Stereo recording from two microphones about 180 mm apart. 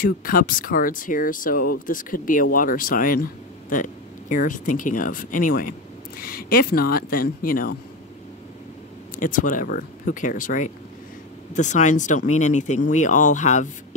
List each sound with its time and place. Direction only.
0.0 s speech: 50° left (ahead or behind)
9.1 s speech: 45° left (ahead or behind)